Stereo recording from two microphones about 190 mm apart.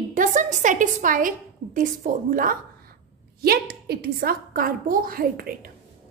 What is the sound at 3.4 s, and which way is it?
A woman's voice, 55° right (ahead or behind).